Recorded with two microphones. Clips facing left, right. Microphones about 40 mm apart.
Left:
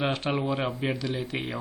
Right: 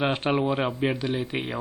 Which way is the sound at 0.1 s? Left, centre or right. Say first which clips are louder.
Right 3 dB; right.